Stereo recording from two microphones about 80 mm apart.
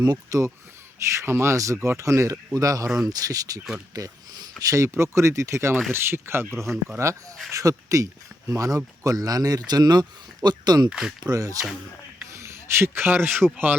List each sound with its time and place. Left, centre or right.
0.0 s speech: right
4.7 s speech: right
6.5 s speech: centre
7.5 s speech: right
10.8 s speech: centre
11.3 s speech: right